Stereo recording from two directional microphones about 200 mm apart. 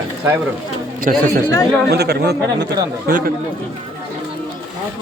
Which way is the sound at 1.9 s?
55° right (ahead or behind).